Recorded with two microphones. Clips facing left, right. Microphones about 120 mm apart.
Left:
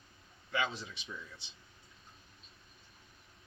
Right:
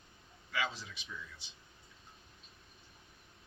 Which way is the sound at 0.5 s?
25° left (ahead or behind).